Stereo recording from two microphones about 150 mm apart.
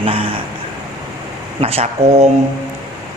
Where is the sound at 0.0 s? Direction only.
40° right (ahead or behind).